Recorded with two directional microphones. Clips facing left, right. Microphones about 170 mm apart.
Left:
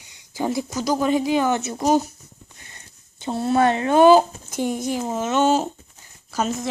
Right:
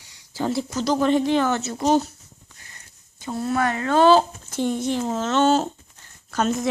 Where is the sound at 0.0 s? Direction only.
20° left (ahead or behind).